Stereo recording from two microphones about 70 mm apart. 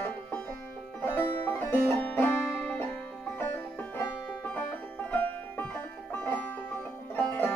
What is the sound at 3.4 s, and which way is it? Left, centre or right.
Music, left.